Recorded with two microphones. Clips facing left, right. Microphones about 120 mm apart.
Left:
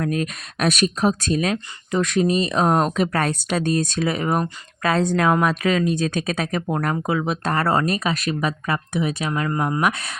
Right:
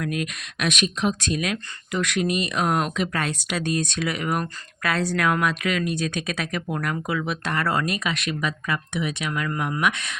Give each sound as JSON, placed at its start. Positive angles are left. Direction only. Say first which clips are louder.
{"t": 0.0, "sound": "speech", "louder": "left 4 dB", "side_deg": 35}